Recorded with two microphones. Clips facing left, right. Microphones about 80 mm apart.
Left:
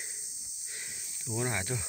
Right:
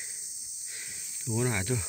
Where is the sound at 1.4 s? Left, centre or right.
Left.